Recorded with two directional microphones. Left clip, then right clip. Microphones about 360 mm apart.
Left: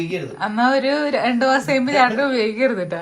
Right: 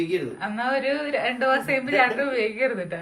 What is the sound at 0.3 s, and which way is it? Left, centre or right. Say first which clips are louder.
A woman's voice: left 7 dB; centre.